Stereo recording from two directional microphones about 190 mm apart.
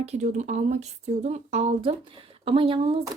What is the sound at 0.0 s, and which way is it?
Speech, 40° right (ahead or behind).